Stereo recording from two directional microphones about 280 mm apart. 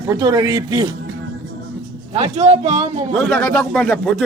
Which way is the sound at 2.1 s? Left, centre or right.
Right.